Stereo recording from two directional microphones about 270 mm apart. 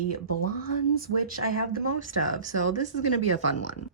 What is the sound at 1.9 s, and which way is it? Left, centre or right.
Speech, right.